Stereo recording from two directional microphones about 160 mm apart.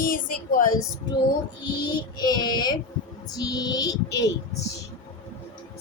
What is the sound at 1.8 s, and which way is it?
A woman's voice, 25° left (ahead or behind).